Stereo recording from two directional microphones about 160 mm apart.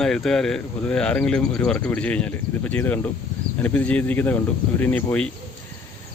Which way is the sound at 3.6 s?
10° left (ahead or behind).